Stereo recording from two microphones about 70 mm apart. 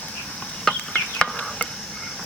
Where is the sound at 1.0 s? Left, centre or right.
Centre.